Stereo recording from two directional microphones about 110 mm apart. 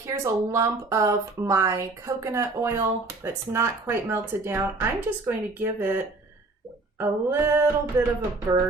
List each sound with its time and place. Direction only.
0.0 s speech: 25° right (ahead or behind)
7.0 s speech: 20° right (ahead or behind)